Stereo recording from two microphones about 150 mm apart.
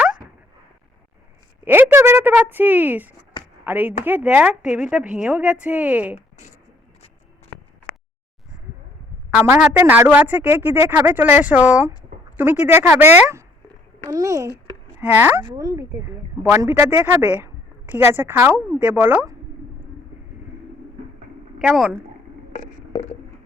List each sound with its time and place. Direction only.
1.6 s speech: 15° right (ahead or behind)
9.7 s speech: 15° right (ahead or behind)
21.6 s speech: 5° right (ahead or behind)